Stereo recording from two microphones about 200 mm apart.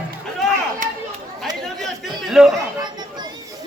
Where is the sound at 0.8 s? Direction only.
40° right (ahead or behind).